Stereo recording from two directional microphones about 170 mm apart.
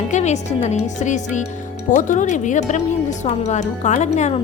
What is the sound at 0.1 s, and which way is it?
A woman's voice, 40° left (ahead or behind).